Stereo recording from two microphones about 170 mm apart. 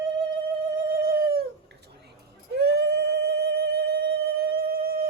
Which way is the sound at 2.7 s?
70° right (ahead or behind).